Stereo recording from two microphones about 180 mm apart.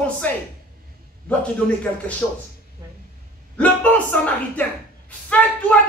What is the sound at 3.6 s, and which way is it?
Speech, 10° left (ahead or behind).